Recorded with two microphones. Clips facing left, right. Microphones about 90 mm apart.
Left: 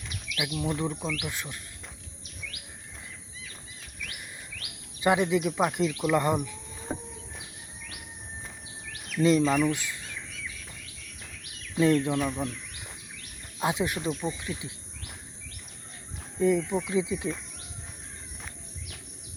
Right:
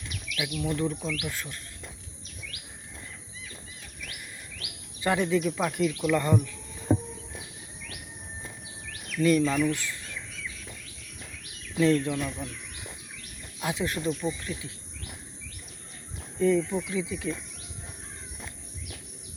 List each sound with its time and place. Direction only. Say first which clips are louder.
0.1 s speech: left 1 dB; 20° left (ahead or behind)
4.9 s speech: left 1 dB; 20° left (ahead or behind)
9.1 s speech: left 1 dB; 25° left (ahead or behind)
11.8 s speech: left 1 dB; 15° left (ahead or behind)
13.6 s speech: left 2 dB; 20° left (ahead or behind)
16.4 s speech: even; 10° left (ahead or behind)
16.8 s speech: left 3 dB; 25° left (ahead or behind)